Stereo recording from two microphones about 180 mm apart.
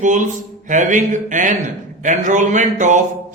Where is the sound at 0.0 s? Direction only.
45° right (ahead or behind).